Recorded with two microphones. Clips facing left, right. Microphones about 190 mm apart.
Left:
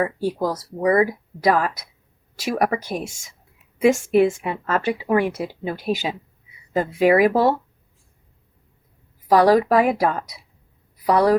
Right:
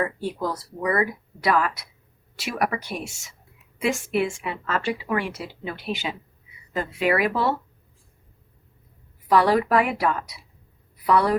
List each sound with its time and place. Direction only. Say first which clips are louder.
0.0 s a woman's voice: left 4 dB; 40° left (ahead or behind)
9.2 s a woman's voice: left 4 dB; 40° left (ahead or behind)